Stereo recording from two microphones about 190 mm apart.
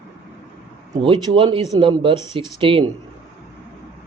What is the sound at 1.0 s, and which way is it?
Speech, 25° right (ahead or behind).